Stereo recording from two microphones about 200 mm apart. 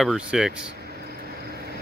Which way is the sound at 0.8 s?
50° right (ahead or behind).